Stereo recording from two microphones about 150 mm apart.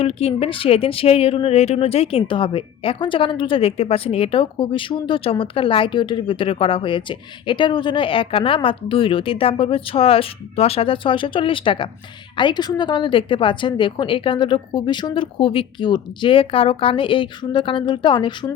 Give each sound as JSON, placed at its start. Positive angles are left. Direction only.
{"t": 0.0, "sound": "speech", "side_deg": 40}